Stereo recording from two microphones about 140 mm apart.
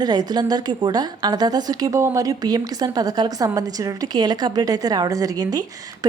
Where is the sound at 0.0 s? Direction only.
30° right (ahead or behind).